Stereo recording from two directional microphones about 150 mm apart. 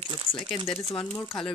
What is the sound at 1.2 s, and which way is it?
Speech, centre (ahead or behind).